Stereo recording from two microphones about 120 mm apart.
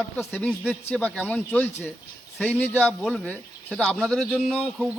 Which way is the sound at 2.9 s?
Centre (ahead or behind).